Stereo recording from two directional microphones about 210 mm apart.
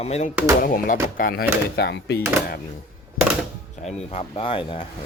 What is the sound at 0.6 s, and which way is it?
Speech, 40° left (ahead or behind).